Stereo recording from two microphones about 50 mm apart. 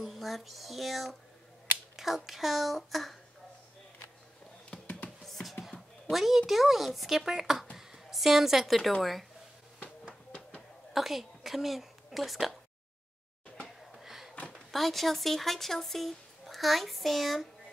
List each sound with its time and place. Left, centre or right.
0.0 s speech: centre
4.7 s music: centre
5.2 s speech: centre
7.7 s music: centre
10.9 s a woman's voice: centre
13.6 s a sound: centre
14.7 s speech: centre